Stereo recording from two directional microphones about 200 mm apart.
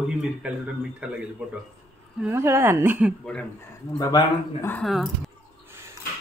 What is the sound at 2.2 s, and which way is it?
Speech, 15° right (ahead or behind).